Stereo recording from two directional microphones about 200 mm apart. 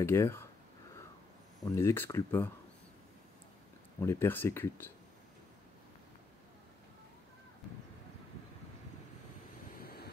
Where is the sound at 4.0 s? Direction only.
10° left (ahead or behind).